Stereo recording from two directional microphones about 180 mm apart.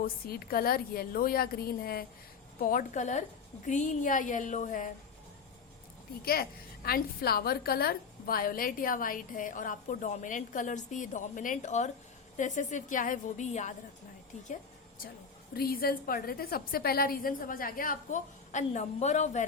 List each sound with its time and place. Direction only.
0.0 s a woman's voice: 55° left (ahead or behind)
6.2 s a woman's voice: 55° left (ahead or behind); by 13.7 s 40° left (ahead or behind)
15.5 s a woman's voice: 55° left (ahead or behind); by 19.5 s 40° left (ahead or behind)